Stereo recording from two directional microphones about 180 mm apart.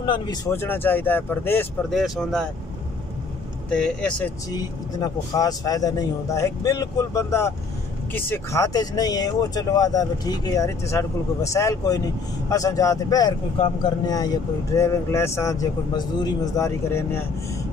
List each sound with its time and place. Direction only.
0.0 s a man's voice: 25° left (ahead or behind)
0.5 s speech: 10° left (ahead or behind)
1.9 s speech: centre (ahead or behind)
3.7 s speech: 5° left (ahead or behind)
4.5 s a man's voice: 20° left (ahead or behind)